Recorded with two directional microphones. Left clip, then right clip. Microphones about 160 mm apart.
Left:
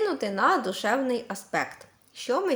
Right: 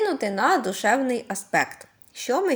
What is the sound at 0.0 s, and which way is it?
A woman's voice, 20° right (ahead or behind).